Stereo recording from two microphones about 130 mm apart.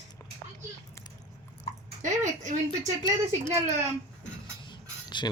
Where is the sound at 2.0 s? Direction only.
70° right (ahead or behind).